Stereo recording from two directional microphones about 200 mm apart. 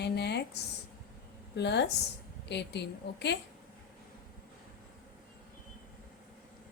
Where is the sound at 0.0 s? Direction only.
55° left (ahead or behind).